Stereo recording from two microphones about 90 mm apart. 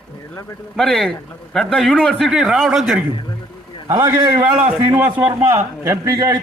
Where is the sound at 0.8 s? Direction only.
5° left (ahead or behind).